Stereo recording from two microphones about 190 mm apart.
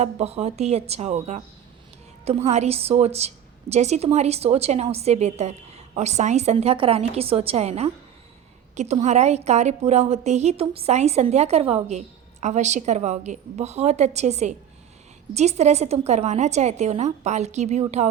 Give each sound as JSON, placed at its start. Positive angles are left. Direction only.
{"t": 0.0, "sound": "a woman's voice", "side_deg": -35}